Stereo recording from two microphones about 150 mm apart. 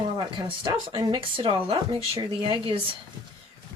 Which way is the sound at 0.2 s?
30° right (ahead or behind).